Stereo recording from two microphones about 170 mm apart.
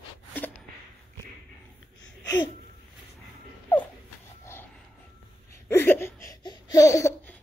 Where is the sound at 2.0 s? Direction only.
25° left (ahead or behind).